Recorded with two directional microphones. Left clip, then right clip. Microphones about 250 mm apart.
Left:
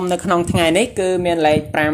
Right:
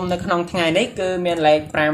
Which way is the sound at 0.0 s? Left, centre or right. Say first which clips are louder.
Left 3 dB; left.